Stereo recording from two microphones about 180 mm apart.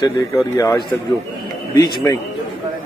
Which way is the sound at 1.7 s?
20° left (ahead or behind).